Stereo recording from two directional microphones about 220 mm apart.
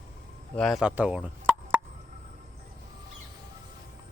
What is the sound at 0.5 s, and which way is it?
Speech, centre (ahead or behind).